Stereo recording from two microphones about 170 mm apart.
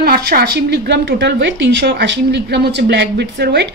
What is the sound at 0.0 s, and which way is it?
A woman's voice, 65° right (ahead or behind).